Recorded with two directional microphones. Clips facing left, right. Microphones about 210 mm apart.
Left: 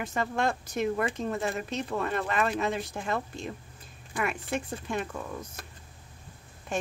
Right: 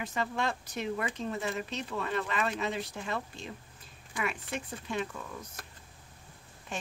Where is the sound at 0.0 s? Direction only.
45° left (ahead or behind).